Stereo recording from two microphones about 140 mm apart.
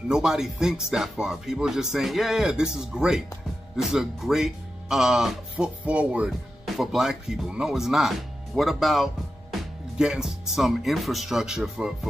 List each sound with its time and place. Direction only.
0.1 s speech: 5° right (ahead or behind)